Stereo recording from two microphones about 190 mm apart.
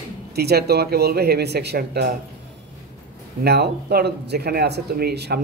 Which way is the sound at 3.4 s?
55° right (ahead or behind).